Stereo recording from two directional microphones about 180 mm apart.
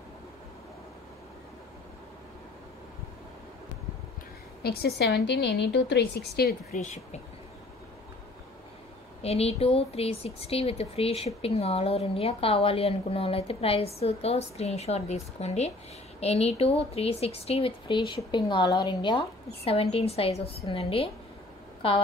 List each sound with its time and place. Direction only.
4.6 s a woman's voice: 65° left (ahead or behind)
6.7 s speech: 40° left (ahead or behind)
9.2 s speech: 35° left (ahead or behind)